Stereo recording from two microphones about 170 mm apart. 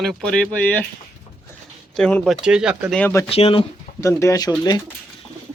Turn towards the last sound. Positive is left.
turn(degrees=25)  # may be behind; listen again after turning